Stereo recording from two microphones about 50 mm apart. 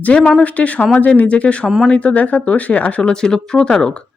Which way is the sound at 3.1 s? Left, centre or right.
Centre.